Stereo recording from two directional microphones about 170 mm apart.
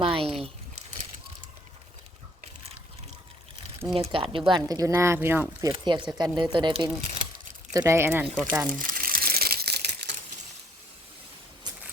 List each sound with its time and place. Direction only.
0.0 s a sound: 35° right (ahead or behind)
3.9 s speech: 35° right (ahead or behind); by 5.7 s 15° right (ahead or behind)
5.7 s speech: 25° right (ahead or behind)
7.7 s speech: 20° right (ahead or behind)
8.8 s crumpling: 55° right (ahead or behind); by 10.2 s 75° right (ahead or behind)